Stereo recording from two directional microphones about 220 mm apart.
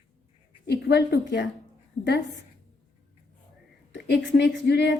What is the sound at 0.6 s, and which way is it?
Speech, 45° left (ahead or behind).